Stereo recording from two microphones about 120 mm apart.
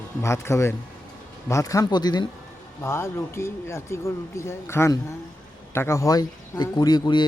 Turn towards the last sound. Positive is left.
turn(degrees=35)  # may be behind; listen again after turning